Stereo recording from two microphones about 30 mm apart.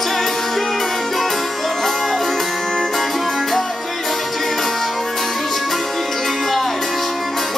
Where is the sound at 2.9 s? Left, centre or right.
Centre.